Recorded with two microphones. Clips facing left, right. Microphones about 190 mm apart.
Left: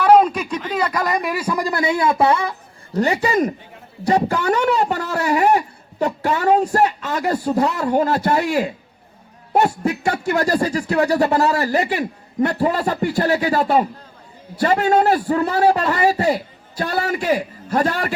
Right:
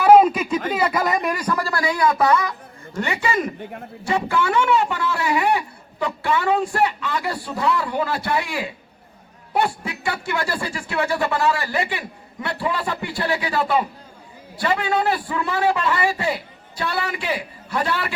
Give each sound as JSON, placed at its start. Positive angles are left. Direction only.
{"t": 0.0, "sound": "a sound", "side_deg": -5}
{"t": 0.7, "sound": "speech", "side_deg": -5}
{"t": 3.6, "sound": "a man's voice", "side_deg": -60}
{"t": 4.0, "sound": "speech", "side_deg": 40}